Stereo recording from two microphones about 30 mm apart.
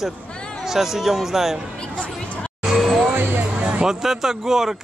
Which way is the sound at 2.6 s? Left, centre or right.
Centre.